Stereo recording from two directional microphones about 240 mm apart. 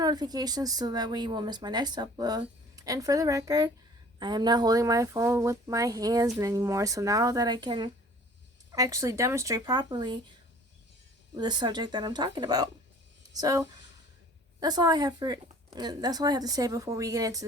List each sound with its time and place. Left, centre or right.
0.0 s speech: centre
11.3 s speech: centre